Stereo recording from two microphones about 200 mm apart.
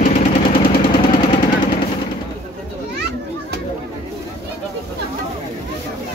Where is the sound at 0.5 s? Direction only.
25° left (ahead or behind).